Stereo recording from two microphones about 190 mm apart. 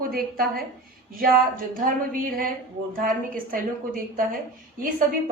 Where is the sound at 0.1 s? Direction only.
55° right (ahead or behind).